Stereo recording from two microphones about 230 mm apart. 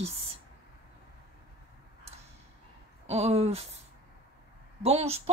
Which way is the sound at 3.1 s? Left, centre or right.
Right.